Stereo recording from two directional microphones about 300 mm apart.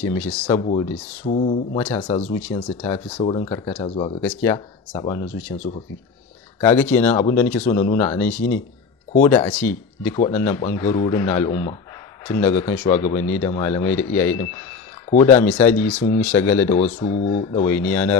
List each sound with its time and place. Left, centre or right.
0.0 s speech: centre
0.5 s speech: centre
4.2 s speech: centre
15.0 s speech: left
15.3 s speech: centre
16.8 s speech: centre